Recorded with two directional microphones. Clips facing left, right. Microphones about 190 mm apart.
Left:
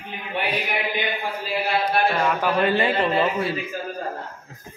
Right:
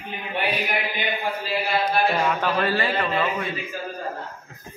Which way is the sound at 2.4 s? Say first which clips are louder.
Left 3 dB; 20° left (ahead or behind).